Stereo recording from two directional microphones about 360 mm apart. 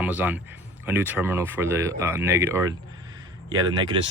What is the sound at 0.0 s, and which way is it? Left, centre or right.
A man's voice, centre.